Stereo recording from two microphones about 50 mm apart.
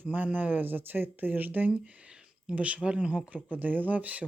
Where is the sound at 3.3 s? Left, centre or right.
Right.